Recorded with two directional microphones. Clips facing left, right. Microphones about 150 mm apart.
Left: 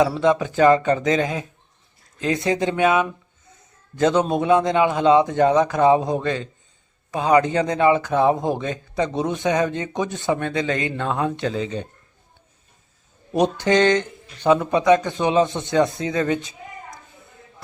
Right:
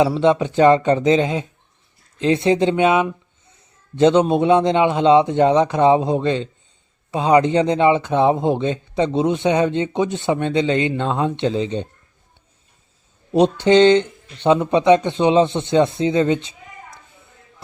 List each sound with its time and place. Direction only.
0.0 s speech: 25° right (ahead or behind)
13.4 s speech: 25° right (ahead or behind)